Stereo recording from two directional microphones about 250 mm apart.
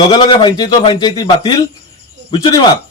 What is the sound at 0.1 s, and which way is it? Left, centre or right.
A man's voice, centre.